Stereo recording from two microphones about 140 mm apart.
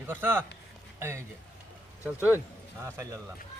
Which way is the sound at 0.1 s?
15° right (ahead or behind).